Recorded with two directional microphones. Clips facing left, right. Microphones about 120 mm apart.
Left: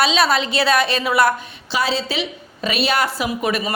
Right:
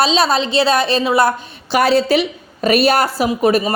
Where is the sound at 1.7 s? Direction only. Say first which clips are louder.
Right 8 dB; 55° right (ahead or behind).